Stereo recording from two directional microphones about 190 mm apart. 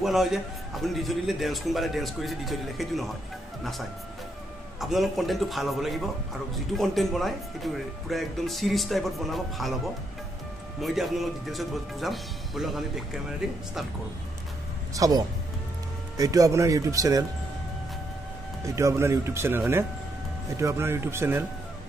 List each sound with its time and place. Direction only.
0.0 s speech: centre (ahead or behind)
4.7 s speech: centre (ahead or behind)
10.8 s speech: centre (ahead or behind)
15.0 s speech: 20° right (ahead or behind)
18.8 s speech: 15° right (ahead or behind)